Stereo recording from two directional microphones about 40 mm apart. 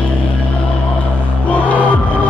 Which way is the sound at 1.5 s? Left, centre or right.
Left.